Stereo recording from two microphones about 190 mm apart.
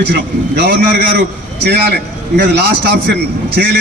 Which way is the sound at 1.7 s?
60° right (ahead or behind).